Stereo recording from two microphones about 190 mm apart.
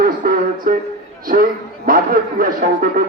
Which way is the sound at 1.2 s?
50° right (ahead or behind).